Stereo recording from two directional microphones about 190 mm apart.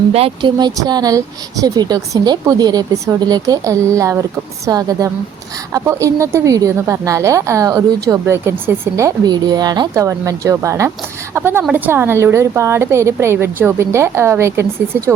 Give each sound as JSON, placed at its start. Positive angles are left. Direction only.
{"t": 0.1, "sound": "a woman's voice", "side_deg": -30}